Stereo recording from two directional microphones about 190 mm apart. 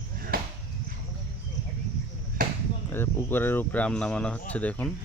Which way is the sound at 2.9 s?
10° left (ahead or behind).